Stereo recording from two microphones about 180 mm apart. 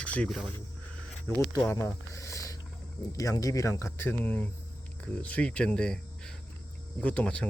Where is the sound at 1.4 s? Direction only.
20° left (ahead or behind).